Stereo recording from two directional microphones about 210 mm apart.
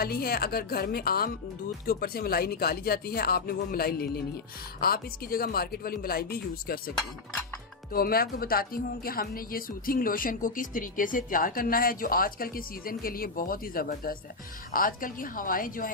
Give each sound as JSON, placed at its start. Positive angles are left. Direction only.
{"t": 0.0, "sound": "speech", "side_deg": 45}
{"t": 7.9, "sound": "a woman's voice", "side_deg": 45}